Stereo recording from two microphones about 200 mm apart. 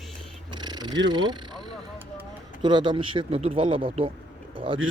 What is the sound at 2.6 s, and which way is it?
A man's voice, 25° right (ahead or behind).